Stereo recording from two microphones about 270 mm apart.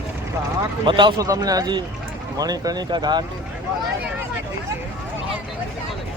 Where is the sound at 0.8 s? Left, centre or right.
Centre.